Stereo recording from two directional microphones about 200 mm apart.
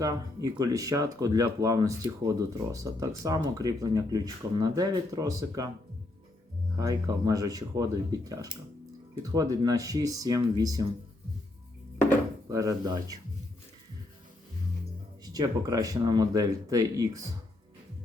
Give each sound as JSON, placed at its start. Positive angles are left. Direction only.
{"t": 0.0, "sound": "speech", "side_deg": -15}
{"t": 6.7, "sound": "speech", "side_deg": -15}
{"t": 12.5, "sound": "speech", "side_deg": -15}
{"t": 15.2, "sound": "speech", "side_deg": -20}